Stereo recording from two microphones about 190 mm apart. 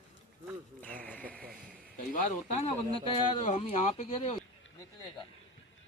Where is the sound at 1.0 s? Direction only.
5° left (ahead or behind).